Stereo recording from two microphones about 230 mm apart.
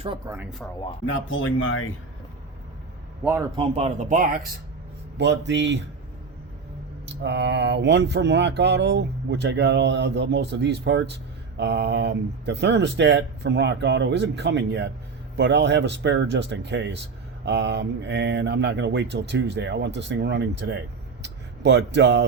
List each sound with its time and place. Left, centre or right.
0.3 s speech: centre
1.0 s speech: left
3.5 s speech: right
5.1 s speech: right
7.0 s speech: right